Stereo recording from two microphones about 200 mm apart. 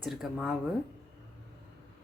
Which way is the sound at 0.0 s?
Centre (ahead or behind).